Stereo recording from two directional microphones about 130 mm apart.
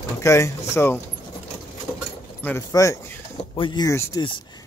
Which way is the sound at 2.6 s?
25° left (ahead or behind).